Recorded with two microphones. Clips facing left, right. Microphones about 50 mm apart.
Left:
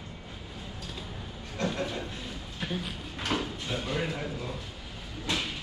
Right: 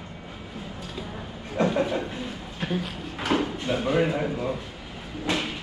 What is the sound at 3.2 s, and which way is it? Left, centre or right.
Speech, centre.